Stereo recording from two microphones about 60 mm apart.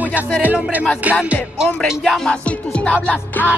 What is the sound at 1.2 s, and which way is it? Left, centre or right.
Music, centre.